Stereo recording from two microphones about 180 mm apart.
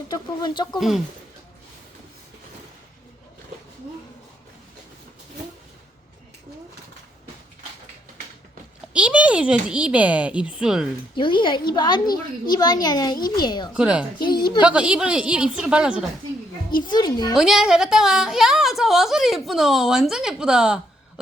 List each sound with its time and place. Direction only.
0.1 s speech: 25° left (ahead or behind)
0.8 s a woman's voice: centre (ahead or behind)
8.9 s speech: 5° right (ahead or behind)
11.1 s a child's voice: 25° left (ahead or behind)
13.7 s a woman's voice: 5° right (ahead or behind)
14.2 s a child's voice: 25° left (ahead or behind)
14.6 s a woman's voice: 5° right (ahead or behind)
16.8 s a child's voice: 25° left (ahead or behind)
17.3 s a woman's voice: 5° right (ahead or behind)